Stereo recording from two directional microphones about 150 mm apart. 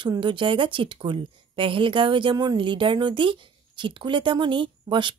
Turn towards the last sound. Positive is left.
turn(degrees=-35)  # may be behind; listen again after turning